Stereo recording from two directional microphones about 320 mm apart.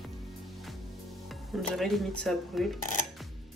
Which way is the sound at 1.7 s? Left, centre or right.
Centre.